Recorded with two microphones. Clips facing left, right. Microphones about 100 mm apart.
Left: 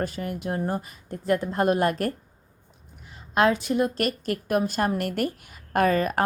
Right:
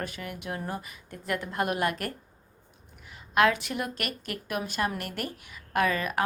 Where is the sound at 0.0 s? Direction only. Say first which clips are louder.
Left 7 dB; 35° left (ahead or behind).